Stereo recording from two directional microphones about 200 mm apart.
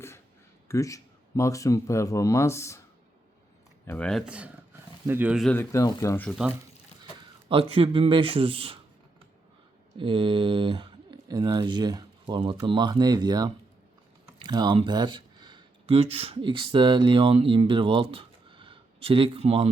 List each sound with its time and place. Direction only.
0.7 s speech: 15° left (ahead or behind)
3.8 s speech: 5° left (ahead or behind)
4.3 s speech: 5° right (ahead or behind)
5.5 s speech: 15° left (ahead or behind)
7.4 s speech: 25° right (ahead or behind)
10.0 s speech: 25° right (ahead or behind)